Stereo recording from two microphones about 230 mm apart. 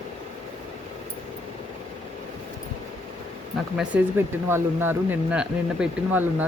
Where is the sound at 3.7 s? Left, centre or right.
Centre.